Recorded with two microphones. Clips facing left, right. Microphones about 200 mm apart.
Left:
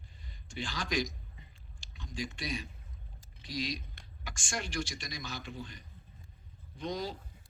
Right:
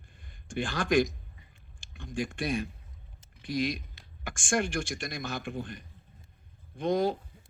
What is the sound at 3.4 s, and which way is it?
A man's voice, 55° right (ahead or behind).